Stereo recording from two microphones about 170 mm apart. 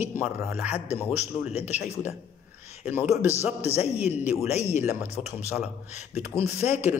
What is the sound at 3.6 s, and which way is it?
Speech, 40° left (ahead or behind).